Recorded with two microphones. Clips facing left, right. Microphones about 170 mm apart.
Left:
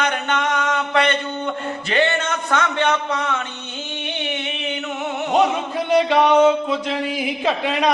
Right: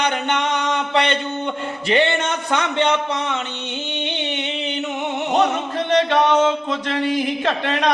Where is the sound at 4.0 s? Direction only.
20° right (ahead or behind).